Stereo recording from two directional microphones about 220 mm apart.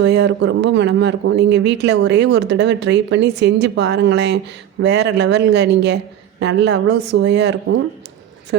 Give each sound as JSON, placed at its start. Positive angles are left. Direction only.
{"t": 0.0, "sound": "speech", "side_deg": -50}